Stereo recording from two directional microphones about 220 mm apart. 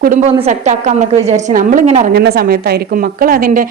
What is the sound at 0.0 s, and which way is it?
A woman's voice, 40° right (ahead or behind).